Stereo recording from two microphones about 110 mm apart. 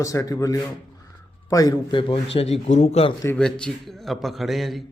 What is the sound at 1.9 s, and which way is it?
Speech, 55° left (ahead or behind).